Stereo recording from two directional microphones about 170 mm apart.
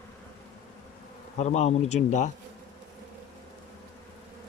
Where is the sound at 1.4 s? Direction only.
40° left (ahead or behind).